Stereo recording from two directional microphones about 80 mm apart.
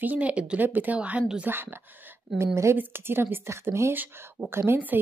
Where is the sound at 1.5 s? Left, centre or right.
Right.